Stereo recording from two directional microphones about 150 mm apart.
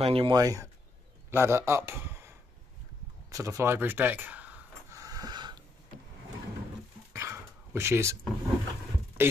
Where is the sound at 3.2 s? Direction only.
20° right (ahead or behind).